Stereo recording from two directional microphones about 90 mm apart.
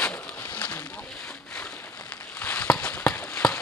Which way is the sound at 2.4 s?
15° left (ahead or behind).